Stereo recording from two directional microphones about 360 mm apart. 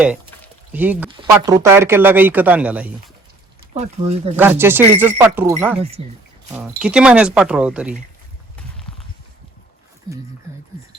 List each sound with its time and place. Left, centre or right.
0.7 s speech: centre
3.9 s speech: centre
4.4 s speech: centre